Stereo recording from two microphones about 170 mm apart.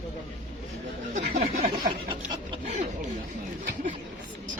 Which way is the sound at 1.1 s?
45° right (ahead or behind).